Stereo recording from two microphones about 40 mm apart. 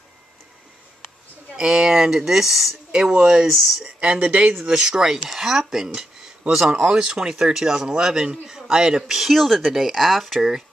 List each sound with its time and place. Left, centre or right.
1.6 s speech: centre
2.9 s speech: centre
4.2 s speech: right
4.6 s speech: right
9.0 s speech: centre